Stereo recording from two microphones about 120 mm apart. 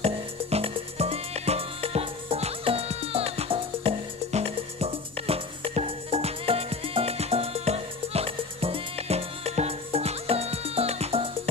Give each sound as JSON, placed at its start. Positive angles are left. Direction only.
{"t": 0.0, "sound": "music", "side_deg": -60}